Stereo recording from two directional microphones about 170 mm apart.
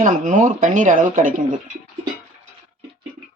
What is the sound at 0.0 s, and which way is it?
Speech, 45° right (ahead or behind).